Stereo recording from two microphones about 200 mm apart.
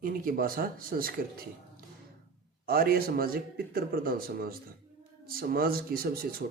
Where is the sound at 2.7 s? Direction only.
45° right (ahead or behind).